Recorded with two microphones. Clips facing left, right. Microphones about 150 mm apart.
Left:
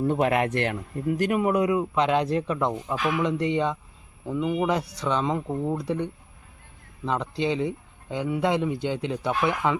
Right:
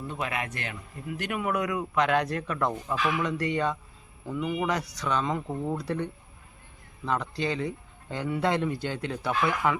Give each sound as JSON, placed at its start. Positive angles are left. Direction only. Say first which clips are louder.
{"t": 0.0, "sound": "speech", "louder": "left 10 dB", "side_deg": 55}
{"t": 1.0, "sound": "speech", "louder": "left 7 dB", "side_deg": 40}